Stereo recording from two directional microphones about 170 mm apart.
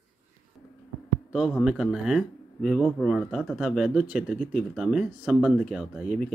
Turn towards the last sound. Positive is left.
turn(degrees=-5)  # may be behind; listen again after turning